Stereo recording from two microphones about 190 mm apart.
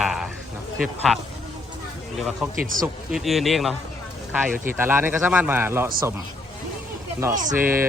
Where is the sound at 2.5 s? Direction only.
45° right (ahead or behind).